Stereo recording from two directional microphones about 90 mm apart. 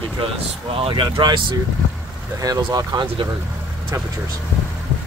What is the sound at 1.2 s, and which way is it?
Speech, 60° right (ahead or behind).